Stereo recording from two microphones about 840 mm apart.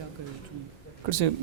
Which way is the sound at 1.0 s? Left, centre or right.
Right.